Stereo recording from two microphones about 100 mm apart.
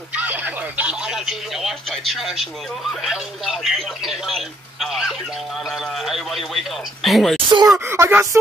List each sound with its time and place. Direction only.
0.1 s a man's voice: 15° right (ahead or behind); by 7.3 s centre (ahead or behind)
7.3 s speech: 50° right (ahead or behind)
7.8 s speech: 25° right (ahead or behind)